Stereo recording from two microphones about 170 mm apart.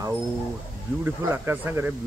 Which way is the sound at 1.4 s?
15° right (ahead or behind).